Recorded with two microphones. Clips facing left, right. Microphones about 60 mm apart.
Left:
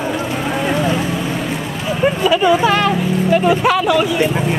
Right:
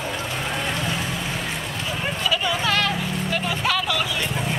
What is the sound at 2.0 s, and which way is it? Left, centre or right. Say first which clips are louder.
Speech: left 12 dB; left.